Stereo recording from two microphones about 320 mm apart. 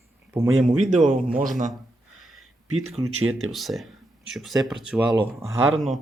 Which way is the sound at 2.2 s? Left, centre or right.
Centre.